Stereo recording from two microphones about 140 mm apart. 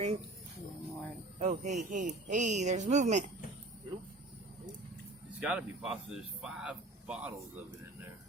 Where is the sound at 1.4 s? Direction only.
55° right (ahead or behind).